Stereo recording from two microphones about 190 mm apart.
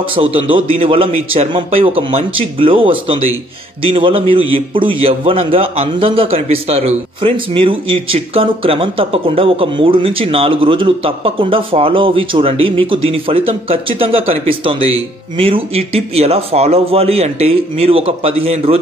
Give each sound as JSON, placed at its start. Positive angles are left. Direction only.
{"t": 0.1, "sound": "a man's voice", "side_deg": -30}